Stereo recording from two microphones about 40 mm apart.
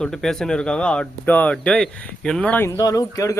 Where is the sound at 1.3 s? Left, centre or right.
Left.